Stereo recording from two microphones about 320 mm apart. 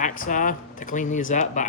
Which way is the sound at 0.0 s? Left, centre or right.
Left.